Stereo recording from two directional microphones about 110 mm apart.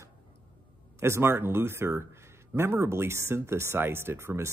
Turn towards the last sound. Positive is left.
turn(degrees=-25)  # may be behind; listen again after turning